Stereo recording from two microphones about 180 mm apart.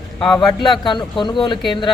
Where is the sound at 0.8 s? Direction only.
25° left (ahead or behind).